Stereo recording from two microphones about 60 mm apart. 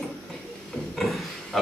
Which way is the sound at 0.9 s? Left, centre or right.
Centre.